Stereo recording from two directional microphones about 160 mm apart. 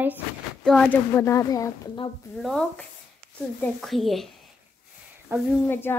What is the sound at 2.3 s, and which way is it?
A woman's voice, 5° left (ahead or behind).